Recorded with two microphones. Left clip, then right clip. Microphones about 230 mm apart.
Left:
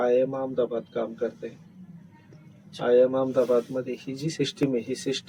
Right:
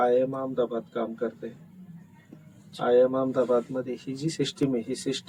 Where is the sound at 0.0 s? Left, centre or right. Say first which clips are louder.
Even; centre.